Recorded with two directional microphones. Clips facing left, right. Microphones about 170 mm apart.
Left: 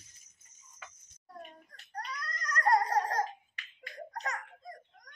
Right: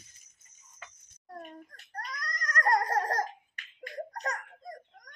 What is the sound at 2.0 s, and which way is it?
Babbling, 45° right (ahead or behind).